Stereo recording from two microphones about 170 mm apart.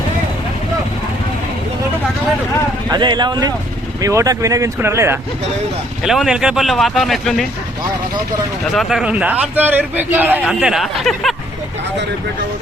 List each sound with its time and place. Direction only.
2.9 s a man's voice: 25° right (ahead or behind)
6.0 s speech: centre (ahead or behind)
8.7 s a man's voice: centre (ahead or behind)